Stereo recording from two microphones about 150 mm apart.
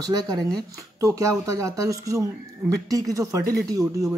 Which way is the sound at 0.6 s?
20° right (ahead or behind).